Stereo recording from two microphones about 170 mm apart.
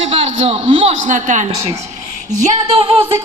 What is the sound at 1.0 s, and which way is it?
Speech, 50° right (ahead or behind).